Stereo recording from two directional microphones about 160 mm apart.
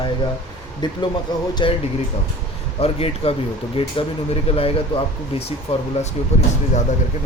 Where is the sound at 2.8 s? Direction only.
40° left (ahead or behind).